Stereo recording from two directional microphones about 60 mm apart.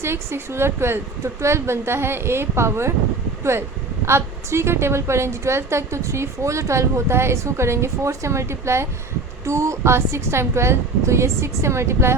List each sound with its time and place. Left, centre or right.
0.0 s a woman's voice: right
4.0 s a woman's voice: right